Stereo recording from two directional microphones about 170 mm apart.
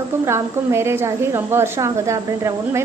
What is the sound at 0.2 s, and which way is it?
A woman's voice, 15° right (ahead or behind).